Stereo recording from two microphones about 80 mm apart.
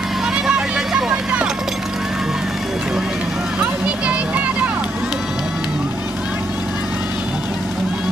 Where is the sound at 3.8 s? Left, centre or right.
Centre.